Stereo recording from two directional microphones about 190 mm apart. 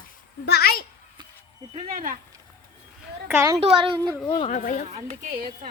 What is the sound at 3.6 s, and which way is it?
Speech, 30° right (ahead or behind).